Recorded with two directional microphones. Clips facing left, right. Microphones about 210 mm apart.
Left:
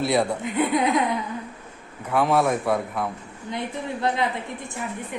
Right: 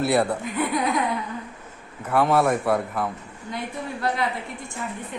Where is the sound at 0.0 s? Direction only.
5° right (ahead or behind).